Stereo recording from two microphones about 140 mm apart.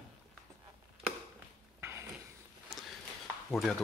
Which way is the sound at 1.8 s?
15° right (ahead or behind).